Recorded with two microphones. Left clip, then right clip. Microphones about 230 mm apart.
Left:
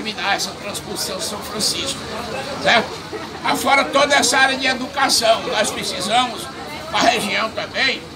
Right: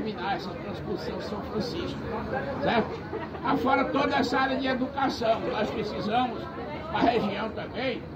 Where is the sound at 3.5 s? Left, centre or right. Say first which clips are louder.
Left 9 dB; left.